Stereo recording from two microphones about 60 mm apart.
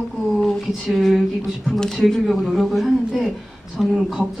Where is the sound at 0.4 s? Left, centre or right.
Centre.